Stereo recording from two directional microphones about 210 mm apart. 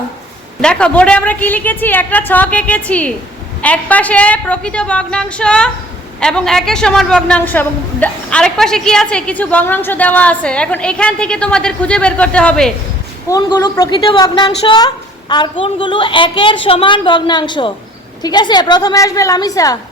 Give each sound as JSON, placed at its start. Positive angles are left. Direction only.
{"t": 0.6, "sound": "a woman's voice", "side_deg": 5}
{"t": 13.2, "sound": "a woman's voice", "side_deg": 15}